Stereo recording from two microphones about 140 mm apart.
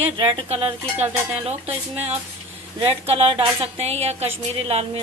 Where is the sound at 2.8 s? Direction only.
40° right (ahead or behind).